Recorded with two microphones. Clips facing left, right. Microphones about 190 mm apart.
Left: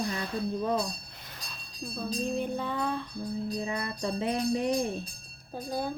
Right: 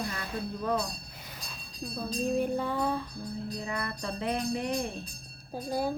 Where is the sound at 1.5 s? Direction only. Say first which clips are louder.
Right 1 dB; 5° right (ahead or behind).